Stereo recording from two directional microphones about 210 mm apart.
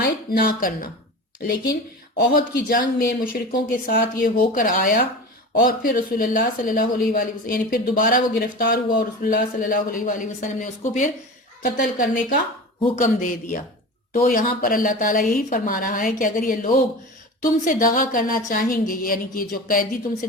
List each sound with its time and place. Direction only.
0.3 s speech: 45° left (ahead or behind)